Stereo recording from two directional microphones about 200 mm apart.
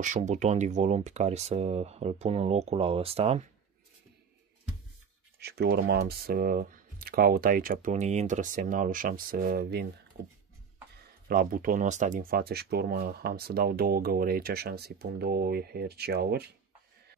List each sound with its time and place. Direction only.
0.0 s speech: 35° right (ahead or behind)
5.4 s speech: 55° right (ahead or behind)
11.2 s speech: 45° right (ahead or behind)